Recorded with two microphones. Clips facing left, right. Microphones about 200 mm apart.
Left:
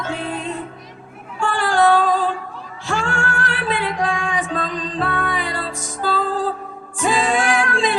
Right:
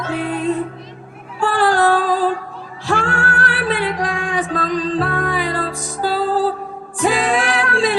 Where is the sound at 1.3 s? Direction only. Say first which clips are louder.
Right 3 dB; 40° right (ahead or behind).